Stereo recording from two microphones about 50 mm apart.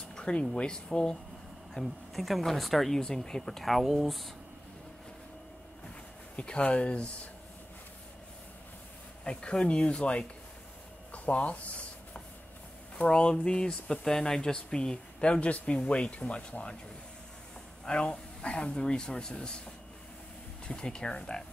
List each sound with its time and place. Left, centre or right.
0.1 s speech: centre
1.7 s speech: centre
6.3 s speech: left
9.2 s speech: left
11.1 s rub: left
13.1 s speech: centre
17.8 s speech: centre
20.6 s speech: centre